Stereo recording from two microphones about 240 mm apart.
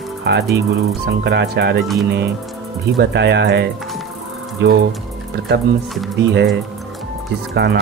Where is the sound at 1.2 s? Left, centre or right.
Right.